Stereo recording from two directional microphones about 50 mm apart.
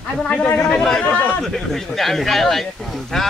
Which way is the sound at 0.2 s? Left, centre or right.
Centre.